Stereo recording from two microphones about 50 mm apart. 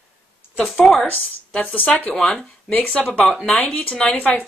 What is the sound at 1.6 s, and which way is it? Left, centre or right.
Speech, left.